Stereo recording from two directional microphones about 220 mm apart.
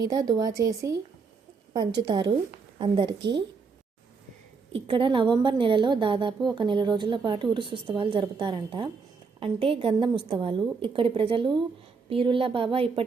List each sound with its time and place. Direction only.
0.1 s a woman's voice: 15° right (ahead or behind)
4.7 s a woman's voice: 25° right (ahead or behind)